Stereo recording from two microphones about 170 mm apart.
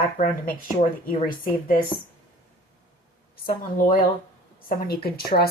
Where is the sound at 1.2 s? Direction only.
55° left (ahead or behind).